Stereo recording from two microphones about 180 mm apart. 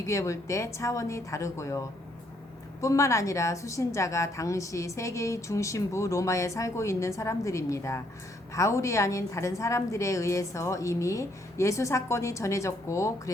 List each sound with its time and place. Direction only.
0.1 s a woman's voice: 15° left (ahead or behind)
2.8 s a woman's voice: 15° left (ahead or behind)